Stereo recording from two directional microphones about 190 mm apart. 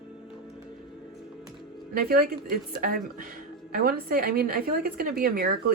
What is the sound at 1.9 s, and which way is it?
A woman's voice, 50° right (ahead or behind).